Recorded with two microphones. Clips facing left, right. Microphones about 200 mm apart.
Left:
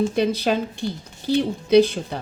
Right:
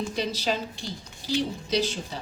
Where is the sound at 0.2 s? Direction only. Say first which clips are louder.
Left 8 dB; 55° left (ahead or behind).